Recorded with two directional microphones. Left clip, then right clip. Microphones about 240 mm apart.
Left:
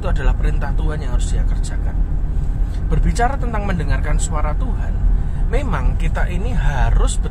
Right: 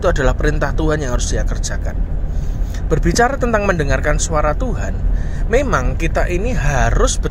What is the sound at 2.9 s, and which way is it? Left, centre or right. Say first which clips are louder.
Speech: right 6 dB; right.